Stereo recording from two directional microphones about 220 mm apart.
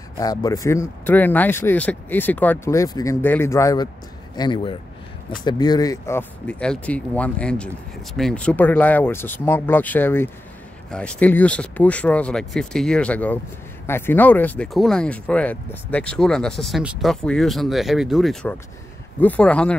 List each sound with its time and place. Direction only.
0.2 s speech: 15° left (ahead or behind)